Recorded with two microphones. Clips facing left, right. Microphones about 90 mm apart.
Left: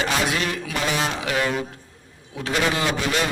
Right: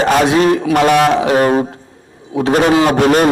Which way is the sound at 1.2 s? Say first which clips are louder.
Right 12 dB; 40° right (ahead or behind).